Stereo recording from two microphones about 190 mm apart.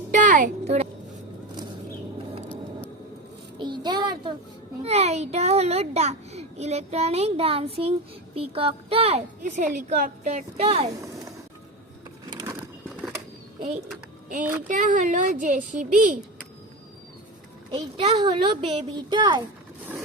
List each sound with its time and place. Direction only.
0.1 s speech: 40° right (ahead or behind)
3.6 s a sound: 25° right (ahead or behind)
4.8 s a child's voice: 35° right (ahead or behind)
12.3 s mechanisms: 20° right (ahead or behind)
14.7 s a child's voice: 40° right (ahead or behind)
17.7 s speech: 25° right (ahead or behind)